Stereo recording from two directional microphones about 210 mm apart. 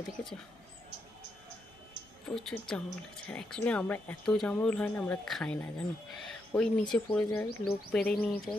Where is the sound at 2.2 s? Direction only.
Centre (ahead or behind).